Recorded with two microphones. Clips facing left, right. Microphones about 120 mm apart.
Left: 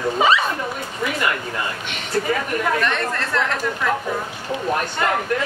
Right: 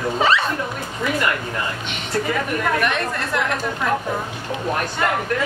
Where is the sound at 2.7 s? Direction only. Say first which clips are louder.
Even; 15° right (ahead or behind).